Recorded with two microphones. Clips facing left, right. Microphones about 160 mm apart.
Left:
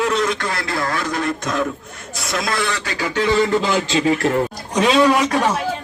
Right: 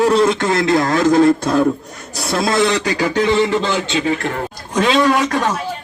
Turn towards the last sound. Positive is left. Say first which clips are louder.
# even
turn(degrees=10)  # may be behind; listen again after turning